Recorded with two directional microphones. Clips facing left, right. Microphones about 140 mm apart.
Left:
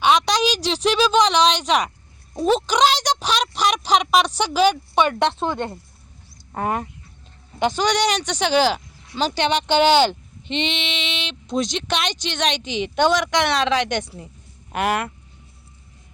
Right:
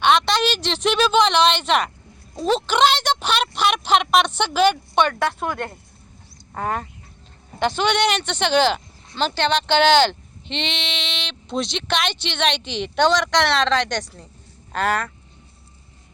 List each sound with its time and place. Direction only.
0.0 s a woman's voice: centre (ahead or behind)
5.2 s speech: 25° left (ahead or behind)
7.8 s speech: centre (ahead or behind)